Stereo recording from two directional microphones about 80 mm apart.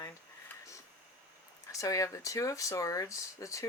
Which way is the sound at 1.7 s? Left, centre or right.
Left.